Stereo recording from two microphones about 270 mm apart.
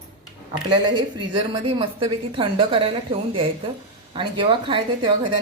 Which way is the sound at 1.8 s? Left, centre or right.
Centre.